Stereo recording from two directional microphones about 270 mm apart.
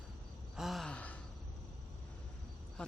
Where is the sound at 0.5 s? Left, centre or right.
Centre.